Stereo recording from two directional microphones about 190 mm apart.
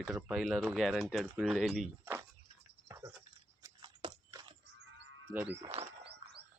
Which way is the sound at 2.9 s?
15° right (ahead or behind).